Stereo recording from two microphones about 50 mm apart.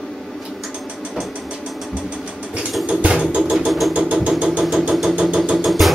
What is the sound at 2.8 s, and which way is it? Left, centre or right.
Music, right.